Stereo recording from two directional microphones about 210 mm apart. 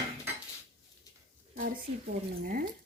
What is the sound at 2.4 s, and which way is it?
Speech, 45° right (ahead or behind).